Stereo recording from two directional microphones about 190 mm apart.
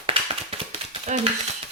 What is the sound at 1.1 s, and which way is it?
Speech, 35° right (ahead or behind).